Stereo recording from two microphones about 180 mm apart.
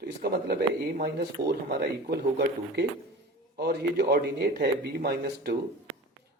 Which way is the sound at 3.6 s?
60° right (ahead or behind).